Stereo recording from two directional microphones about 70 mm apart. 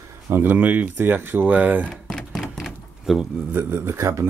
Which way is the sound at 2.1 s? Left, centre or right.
Centre.